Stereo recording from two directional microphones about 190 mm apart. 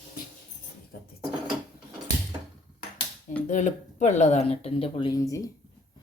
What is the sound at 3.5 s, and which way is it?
Speech, 40° left (ahead or behind).